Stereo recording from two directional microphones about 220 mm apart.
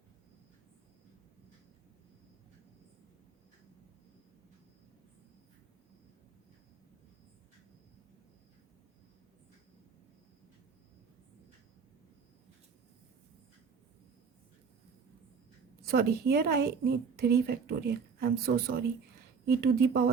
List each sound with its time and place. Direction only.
15.9 s speech: 45° right (ahead or behind)